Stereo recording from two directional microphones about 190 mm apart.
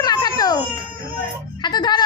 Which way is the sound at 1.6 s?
20° left (ahead or behind).